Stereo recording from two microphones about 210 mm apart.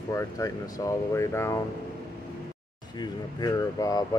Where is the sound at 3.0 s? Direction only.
20° left (ahead or behind).